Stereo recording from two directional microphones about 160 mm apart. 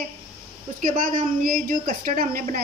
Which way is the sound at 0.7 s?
55° right (ahead or behind).